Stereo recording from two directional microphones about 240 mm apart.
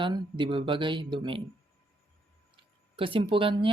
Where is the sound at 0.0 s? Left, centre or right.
Centre.